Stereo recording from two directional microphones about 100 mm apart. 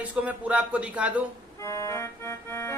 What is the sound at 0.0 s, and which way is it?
Speech, 15° right (ahead or behind).